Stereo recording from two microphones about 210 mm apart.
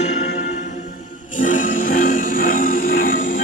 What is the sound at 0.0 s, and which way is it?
Music, 35° left (ahead or behind).